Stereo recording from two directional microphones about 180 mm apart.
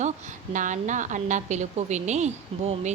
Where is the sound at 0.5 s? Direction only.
45° right (ahead or behind).